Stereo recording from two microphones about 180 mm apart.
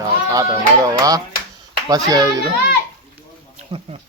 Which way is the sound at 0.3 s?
20° right (ahead or behind).